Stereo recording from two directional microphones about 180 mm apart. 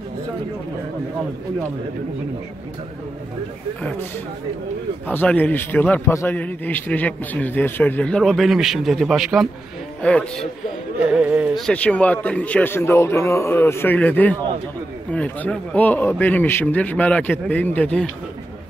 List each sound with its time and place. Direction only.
5.0 s a man's voice: 10° left (ahead or behind)
11.0 s yodeling: 5° right (ahead or behind)
11.6 s a man's voice: 5° left (ahead or behind)